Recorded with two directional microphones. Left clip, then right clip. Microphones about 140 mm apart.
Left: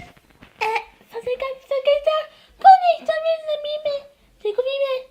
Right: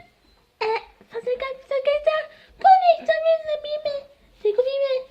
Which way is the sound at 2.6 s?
20° right (ahead or behind).